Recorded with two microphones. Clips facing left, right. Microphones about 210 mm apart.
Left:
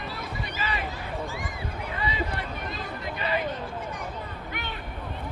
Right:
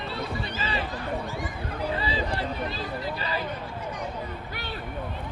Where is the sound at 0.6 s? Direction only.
30° right (ahead or behind).